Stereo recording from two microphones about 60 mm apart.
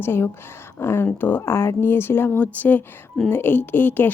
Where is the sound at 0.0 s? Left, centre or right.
Left.